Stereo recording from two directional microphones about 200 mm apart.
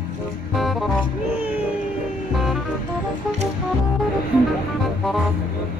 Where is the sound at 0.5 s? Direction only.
Centre (ahead or behind).